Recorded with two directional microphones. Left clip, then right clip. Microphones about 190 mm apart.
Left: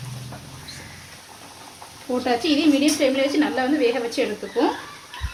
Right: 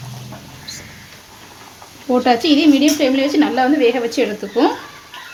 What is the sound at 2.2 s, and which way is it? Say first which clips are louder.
A woman's voice: right 6 dB; 50° right (ahead or behind).